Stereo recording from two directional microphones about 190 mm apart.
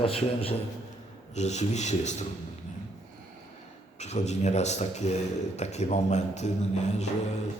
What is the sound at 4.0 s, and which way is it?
Speech, 35° left (ahead or behind).